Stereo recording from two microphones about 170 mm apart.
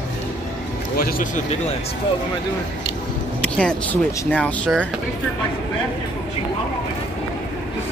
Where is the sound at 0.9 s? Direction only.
60° left (ahead or behind).